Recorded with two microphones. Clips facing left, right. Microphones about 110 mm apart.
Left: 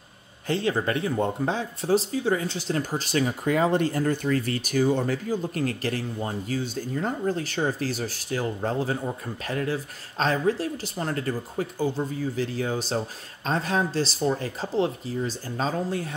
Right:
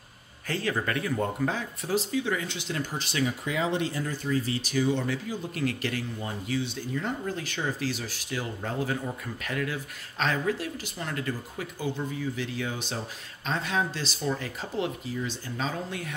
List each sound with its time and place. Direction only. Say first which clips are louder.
0.5 s speech: left 4 dB; 25° left (ahead or behind)